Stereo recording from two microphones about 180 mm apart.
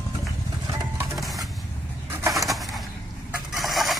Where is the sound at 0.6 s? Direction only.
20° right (ahead or behind).